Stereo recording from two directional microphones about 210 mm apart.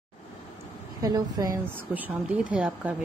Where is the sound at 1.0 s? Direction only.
15° right (ahead or behind).